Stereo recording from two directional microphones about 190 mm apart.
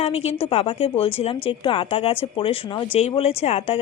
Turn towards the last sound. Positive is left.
turn(degrees=30)  # may be behind; listen again after turning